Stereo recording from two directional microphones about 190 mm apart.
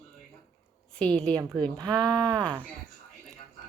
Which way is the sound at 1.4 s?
15° right (ahead or behind).